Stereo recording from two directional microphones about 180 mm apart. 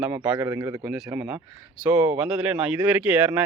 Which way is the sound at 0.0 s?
10° right (ahead or behind).